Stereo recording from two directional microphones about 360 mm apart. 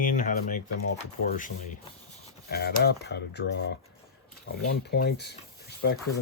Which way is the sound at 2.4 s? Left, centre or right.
Left.